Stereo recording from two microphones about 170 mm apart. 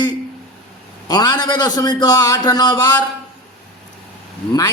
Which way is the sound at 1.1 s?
25° left (ahead or behind).